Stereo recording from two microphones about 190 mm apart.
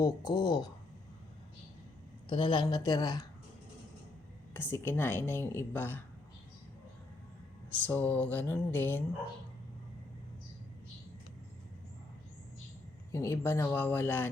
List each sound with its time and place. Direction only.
0.3 s a woman's voice: 20° left (ahead or behind)
2.3 s a woman's voice: 25° left (ahead or behind)
4.5 s speech: 10° left (ahead or behind)
7.9 s speech: 10° left (ahead or behind)
13.1 s speech: 15° left (ahead or behind)